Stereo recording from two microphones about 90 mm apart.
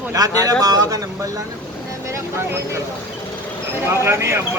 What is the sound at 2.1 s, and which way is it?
Speech, 35° right (ahead or behind).